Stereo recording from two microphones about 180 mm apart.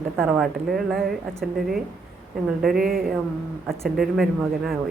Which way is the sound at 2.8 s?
55° right (ahead or behind).